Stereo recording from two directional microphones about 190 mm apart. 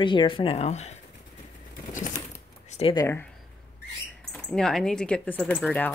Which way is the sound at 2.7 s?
30° left (ahead or behind).